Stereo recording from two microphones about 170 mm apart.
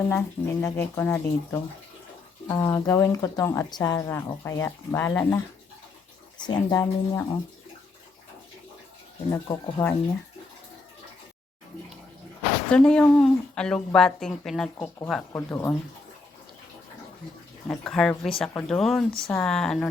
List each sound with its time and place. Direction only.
0.1 s speech: 10° left (ahead or behind)
6.4 s speech: 25° left (ahead or behind)
9.3 s speech: 15° left (ahead or behind)
12.7 s speech: 5° left (ahead or behind)
15.3 s speech: 15° left (ahead or behind)
17.7 s speech: 5° left (ahead or behind)